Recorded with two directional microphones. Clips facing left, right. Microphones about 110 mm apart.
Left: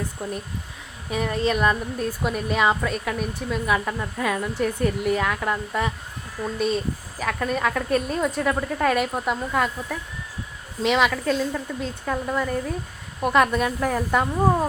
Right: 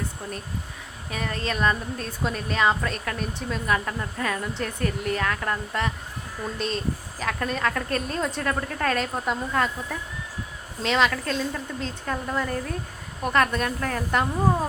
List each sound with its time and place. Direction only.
0.2 s speech: 15° left (ahead or behind)